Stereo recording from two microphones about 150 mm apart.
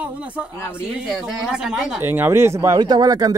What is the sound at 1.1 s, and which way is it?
Speech, 5° right (ahead or behind).